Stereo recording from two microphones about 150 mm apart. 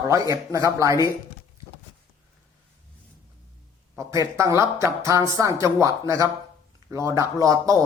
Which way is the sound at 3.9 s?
20° right (ahead or behind).